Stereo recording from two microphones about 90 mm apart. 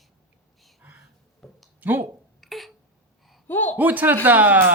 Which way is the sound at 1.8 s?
20° right (ahead or behind).